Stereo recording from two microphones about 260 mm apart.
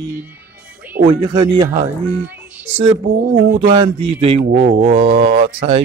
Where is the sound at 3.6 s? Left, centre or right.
Centre.